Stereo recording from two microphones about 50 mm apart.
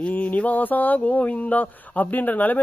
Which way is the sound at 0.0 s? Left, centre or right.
Left.